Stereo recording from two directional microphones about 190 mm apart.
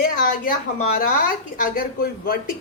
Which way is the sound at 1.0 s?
50° left (ahead or behind).